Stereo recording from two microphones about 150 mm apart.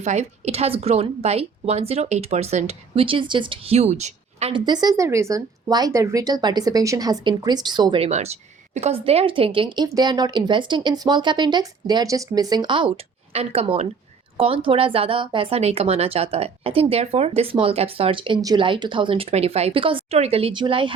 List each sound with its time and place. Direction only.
0.0 s a woman's voice: 50° right (ahead or behind)
4.5 s speech: 30° right (ahead or behind)